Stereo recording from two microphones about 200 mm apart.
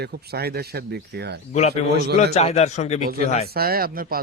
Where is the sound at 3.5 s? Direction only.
50° right (ahead or behind).